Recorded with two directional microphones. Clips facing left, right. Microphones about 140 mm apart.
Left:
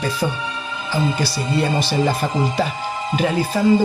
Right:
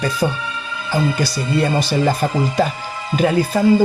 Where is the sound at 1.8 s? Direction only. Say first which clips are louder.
Right 2 dB; 45° right (ahead or behind).